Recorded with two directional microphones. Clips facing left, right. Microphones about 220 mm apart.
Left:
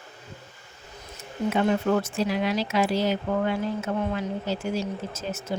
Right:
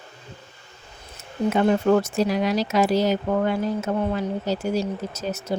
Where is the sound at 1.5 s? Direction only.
40° right (ahead or behind).